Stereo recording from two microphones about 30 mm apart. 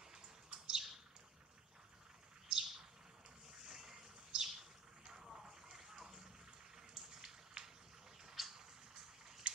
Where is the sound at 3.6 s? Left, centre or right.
Centre.